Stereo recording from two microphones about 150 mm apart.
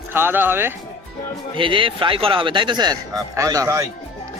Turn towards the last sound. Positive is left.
turn(degrees=-20)  # may be behind; listen again after turning